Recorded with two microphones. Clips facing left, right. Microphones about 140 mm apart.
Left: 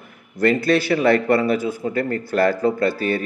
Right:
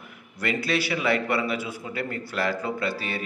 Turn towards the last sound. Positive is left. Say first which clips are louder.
# left 9 dB
turn(degrees=50)  # may be behind; listen again after turning